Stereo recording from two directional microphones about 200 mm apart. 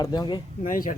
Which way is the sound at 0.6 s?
40° left (ahead or behind).